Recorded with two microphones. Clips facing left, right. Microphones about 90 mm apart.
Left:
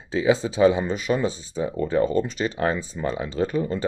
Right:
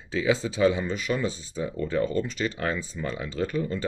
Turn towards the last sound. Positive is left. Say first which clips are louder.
# left 4 dB
turn(degrees=25)  # may be behind; listen again after turning